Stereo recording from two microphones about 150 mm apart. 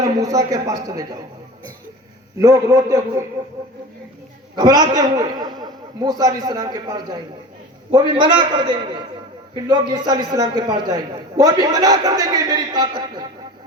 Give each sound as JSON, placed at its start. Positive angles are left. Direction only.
{"t": 0.0, "sound": "a man's voice", "side_deg": -20}
{"t": 2.4, "sound": "a man's voice", "side_deg": -20}
{"t": 4.5, "sound": "a man's voice", "side_deg": -25}